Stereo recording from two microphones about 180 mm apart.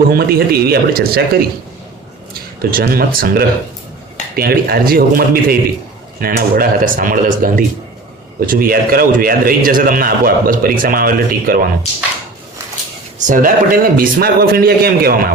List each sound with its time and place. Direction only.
0.1 s a man's voice: 60° right (ahead or behind)
13.1 s a man's voice: 45° right (ahead or behind)